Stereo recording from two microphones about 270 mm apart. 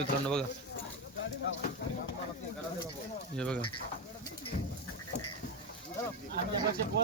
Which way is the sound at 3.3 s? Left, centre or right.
Centre.